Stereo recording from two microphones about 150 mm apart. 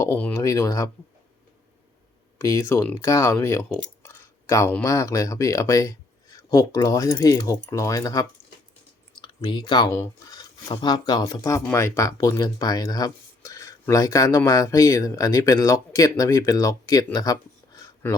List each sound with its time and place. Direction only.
0.0 s speech: 15° left (ahead or behind)
2.4 s speech: 20° left (ahead or behind)
4.0 s a sound: 20° left (ahead or behind)
4.7 s speech: 20° left (ahead or behind)